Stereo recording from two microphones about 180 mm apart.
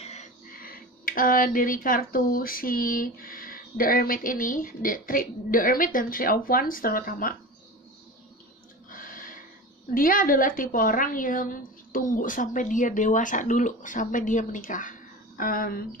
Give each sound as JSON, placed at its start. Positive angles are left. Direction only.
{"t": 0.0, "sound": "speech", "side_deg": 40}
{"t": 8.9, "sound": "a sound", "side_deg": 50}
{"t": 9.9, "sound": "a woman's voice", "side_deg": 50}